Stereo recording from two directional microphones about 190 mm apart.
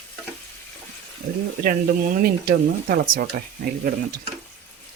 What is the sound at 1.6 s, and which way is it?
Speech, 50° right (ahead or behind).